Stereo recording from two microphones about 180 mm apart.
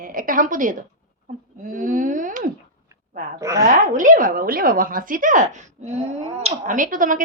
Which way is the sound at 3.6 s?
45° right (ahead or behind).